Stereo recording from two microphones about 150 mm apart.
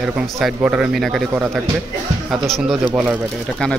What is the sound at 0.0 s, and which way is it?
Speech, centre (ahead or behind).